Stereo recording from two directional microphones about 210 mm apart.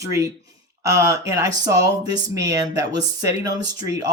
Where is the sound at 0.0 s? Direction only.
15° right (ahead or behind).